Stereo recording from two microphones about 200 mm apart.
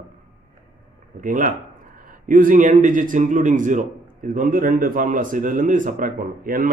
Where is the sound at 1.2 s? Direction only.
40° right (ahead or behind).